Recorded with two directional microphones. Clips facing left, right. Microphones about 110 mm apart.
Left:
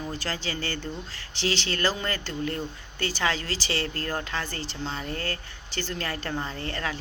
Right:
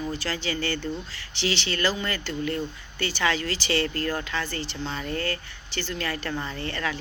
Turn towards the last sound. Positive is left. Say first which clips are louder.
# right 2 dB
turn(degrees=30)  # may be behind; listen again after turning